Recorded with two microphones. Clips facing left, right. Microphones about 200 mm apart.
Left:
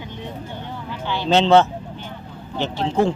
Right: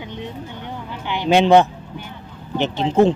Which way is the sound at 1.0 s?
15° right (ahead or behind).